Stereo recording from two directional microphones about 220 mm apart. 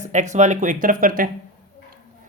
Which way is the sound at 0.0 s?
35° right (ahead or behind).